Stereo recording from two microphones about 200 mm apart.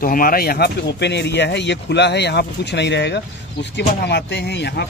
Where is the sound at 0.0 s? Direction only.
45° left (ahead or behind).